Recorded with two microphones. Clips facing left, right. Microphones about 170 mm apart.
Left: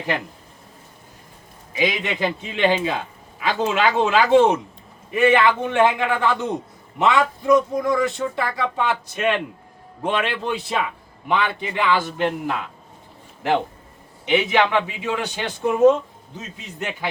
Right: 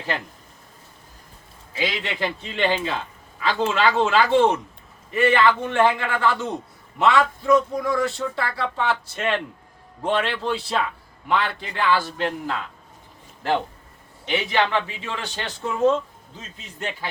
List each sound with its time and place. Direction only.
1.7 s speech: 15° left (ahead or behind)
14.3 s speech: 15° left (ahead or behind)